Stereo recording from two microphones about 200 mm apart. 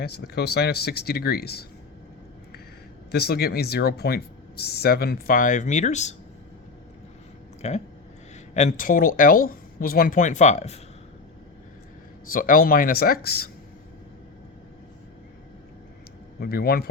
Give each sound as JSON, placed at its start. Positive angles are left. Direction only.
{"t": 0.0, "sound": "speech", "side_deg": 55}
{"t": 3.1, "sound": "speech", "side_deg": 55}
{"t": 7.6, "sound": "speech", "side_deg": 35}
{"t": 12.3, "sound": "speech", "side_deg": 45}
{"t": 16.4, "sound": "speech", "side_deg": 50}